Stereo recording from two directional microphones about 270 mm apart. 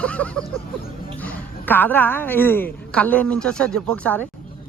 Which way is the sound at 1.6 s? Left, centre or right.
Centre.